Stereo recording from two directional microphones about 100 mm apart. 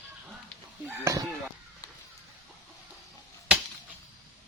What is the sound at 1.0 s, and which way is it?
Chicken, 35° right (ahead or behind).